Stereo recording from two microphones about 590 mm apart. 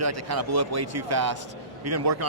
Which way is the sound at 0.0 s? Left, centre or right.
Right.